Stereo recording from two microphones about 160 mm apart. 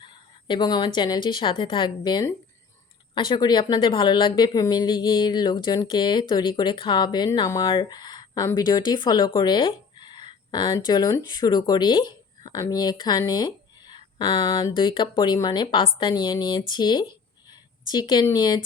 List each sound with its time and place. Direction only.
0.0 s speech: 30° left (ahead or behind)
17.5 s a sound: 25° left (ahead or behind)
18.3 s speech: 25° left (ahead or behind)